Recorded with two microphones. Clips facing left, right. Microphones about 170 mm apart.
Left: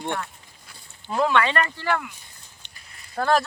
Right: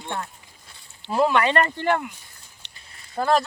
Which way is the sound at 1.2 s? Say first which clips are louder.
Even; 10° right (ahead or behind).